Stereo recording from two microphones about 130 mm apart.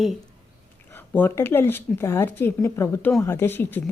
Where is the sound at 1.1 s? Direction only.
15° left (ahead or behind).